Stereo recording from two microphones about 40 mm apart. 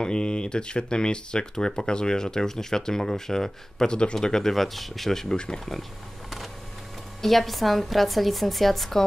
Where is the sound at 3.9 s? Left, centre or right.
Left.